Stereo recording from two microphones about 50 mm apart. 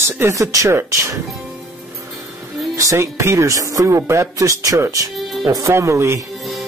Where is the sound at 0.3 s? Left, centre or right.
Right.